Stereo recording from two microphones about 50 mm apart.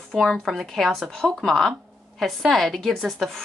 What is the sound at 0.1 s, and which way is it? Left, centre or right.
Speech, centre.